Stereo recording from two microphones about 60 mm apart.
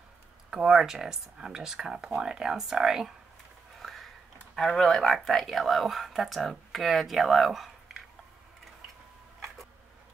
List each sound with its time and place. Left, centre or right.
0.7 s speech: centre
3.8 s a sound: centre
4.6 s speech: centre